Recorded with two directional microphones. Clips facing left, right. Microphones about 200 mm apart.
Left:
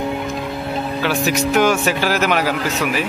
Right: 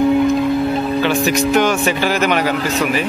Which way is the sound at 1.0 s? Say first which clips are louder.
Even; 5° left (ahead or behind).